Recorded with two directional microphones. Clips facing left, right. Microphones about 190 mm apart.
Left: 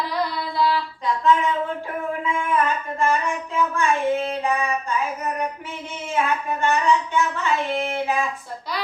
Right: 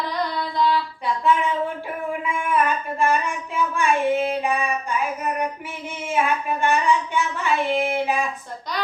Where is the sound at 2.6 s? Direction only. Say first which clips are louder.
Right 1 dB; 15° right (ahead or behind).